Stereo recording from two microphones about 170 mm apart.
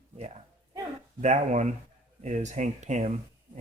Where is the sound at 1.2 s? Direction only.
40° right (ahead or behind).